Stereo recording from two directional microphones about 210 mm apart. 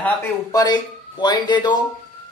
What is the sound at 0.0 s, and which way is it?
Speech, 15° left (ahead or behind).